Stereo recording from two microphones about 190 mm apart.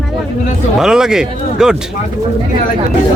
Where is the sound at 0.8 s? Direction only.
5° right (ahead or behind).